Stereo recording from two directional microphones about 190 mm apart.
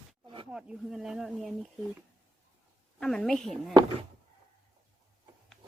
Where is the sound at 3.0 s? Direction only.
Centre (ahead or behind).